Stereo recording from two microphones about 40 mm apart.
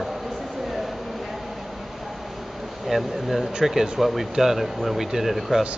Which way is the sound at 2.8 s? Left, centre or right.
Centre.